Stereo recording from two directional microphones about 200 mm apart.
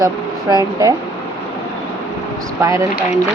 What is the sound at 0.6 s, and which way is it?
Speech, 15° right (ahead or behind).